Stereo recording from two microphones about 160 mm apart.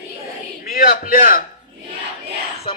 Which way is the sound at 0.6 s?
60° left (ahead or behind).